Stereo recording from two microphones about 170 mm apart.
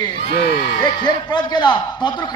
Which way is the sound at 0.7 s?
25° left (ahead or behind).